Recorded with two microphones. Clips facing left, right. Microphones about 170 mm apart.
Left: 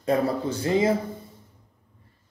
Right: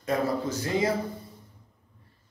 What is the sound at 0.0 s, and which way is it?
Speech, 30° left (ahead or behind).